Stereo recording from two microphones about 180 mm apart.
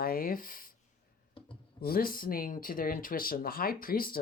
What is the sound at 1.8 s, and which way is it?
Speech, 55° left (ahead or behind).